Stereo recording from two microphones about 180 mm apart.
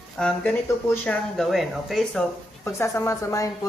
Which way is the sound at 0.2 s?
5° left (ahead or behind).